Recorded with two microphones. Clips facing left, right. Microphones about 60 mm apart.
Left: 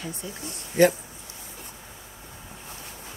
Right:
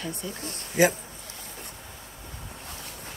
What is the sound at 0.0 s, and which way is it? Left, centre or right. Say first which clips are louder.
Speech: right 1 dB; right.